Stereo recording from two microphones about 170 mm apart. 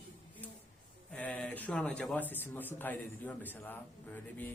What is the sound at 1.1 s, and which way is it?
Speech, 10° left (ahead or behind).